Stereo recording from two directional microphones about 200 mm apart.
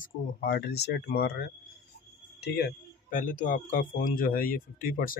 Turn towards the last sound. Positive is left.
turn(degrees=45)  # may be behind; listen again after turning